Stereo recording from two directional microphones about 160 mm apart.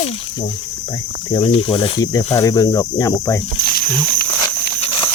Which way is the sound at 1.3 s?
35° left (ahead or behind).